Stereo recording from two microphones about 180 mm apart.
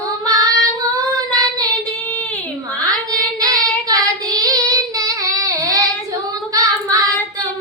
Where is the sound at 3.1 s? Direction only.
20° right (ahead or behind).